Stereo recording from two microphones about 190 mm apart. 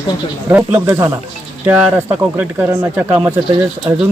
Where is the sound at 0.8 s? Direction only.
10° right (ahead or behind).